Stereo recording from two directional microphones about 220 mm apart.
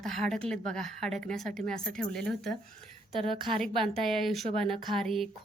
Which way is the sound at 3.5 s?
Centre (ahead or behind).